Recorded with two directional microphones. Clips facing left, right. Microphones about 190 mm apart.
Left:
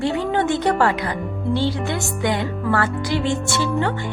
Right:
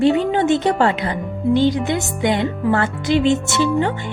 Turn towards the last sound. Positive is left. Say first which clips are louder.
# right 3 dB
turn(degrees=-20)  # may be behind; listen again after turning